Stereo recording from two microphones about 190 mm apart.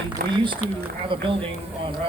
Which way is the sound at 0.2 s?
50° right (ahead or behind).